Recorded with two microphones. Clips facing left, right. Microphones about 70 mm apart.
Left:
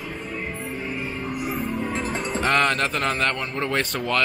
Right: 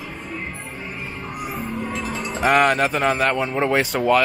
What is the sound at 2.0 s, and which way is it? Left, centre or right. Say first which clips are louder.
Speech: right 5 dB; centre.